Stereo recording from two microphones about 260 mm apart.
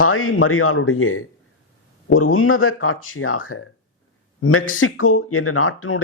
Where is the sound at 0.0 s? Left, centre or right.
Left.